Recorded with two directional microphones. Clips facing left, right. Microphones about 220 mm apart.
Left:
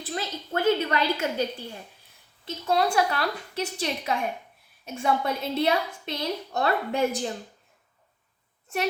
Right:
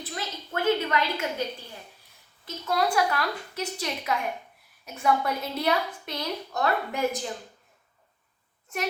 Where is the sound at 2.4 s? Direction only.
25° left (ahead or behind).